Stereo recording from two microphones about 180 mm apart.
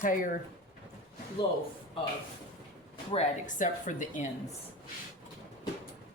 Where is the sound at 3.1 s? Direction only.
40° left (ahead or behind).